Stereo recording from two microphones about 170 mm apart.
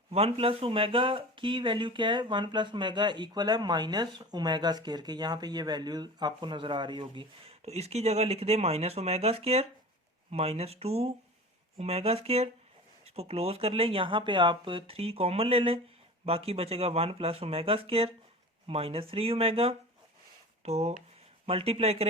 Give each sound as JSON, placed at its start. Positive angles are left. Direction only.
{"t": 0.1, "sound": "speech", "side_deg": -35}